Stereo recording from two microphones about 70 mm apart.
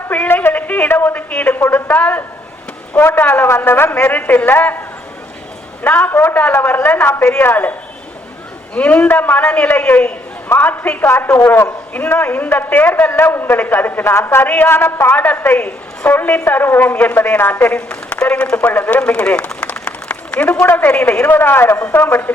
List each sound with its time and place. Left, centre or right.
0.1 s a sound: left
1.3 s a man's voice: left
5.8 s a man's voice: centre
6.1 s a man's voice: left
6.7 s a man's voice: left
8.7 s a man's voice: centre; by 11.4 s left
11.9 s a man's voice: left
17.7 s a man's voice: centre
20.7 s a man's voice: left
20.9 s a man's voice: centre
21.3 s a man's voice: left